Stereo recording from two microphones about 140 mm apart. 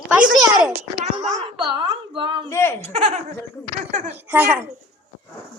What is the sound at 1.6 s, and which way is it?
Speech, 35° right (ahead or behind).